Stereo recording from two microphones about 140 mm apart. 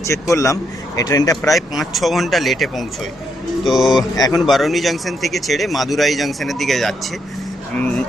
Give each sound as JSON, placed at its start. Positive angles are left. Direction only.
{"t": 0.0, "sound": "speech", "side_deg": 20}
{"t": 1.4, "sound": "speech", "side_deg": 0}